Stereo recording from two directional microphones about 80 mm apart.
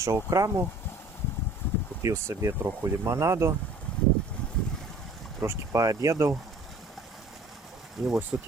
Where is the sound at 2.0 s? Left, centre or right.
Right.